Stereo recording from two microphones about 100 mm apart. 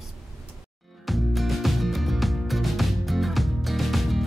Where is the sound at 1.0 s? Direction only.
Centre (ahead or behind).